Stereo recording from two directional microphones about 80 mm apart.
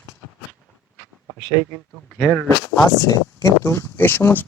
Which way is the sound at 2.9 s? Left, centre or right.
Left.